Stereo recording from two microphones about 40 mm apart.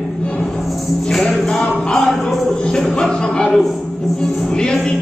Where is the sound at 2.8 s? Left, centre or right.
Centre.